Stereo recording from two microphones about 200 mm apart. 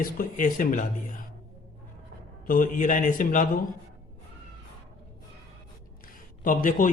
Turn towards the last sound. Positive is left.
turn(degrees=40)  # may be behind; listen again after turning